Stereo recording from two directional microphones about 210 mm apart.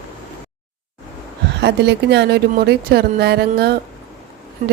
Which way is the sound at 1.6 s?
55° right (ahead or behind).